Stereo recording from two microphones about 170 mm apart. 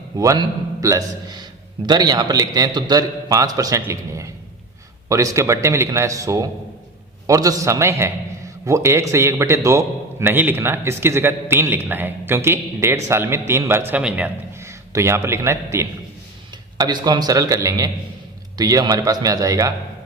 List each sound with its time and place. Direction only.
0.2 s a man's voice: 20° right (ahead or behind)